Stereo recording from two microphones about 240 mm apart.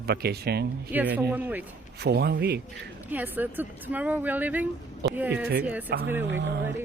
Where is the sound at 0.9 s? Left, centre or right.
Centre.